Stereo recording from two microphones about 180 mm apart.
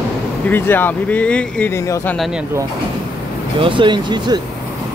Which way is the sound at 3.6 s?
25° right (ahead or behind).